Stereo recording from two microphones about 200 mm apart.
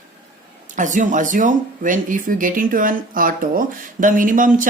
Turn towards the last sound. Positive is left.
turn(degrees=-40)  # may be behind; listen again after turning